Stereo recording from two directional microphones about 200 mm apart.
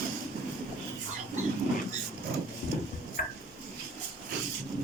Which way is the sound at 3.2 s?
40° left (ahead or behind).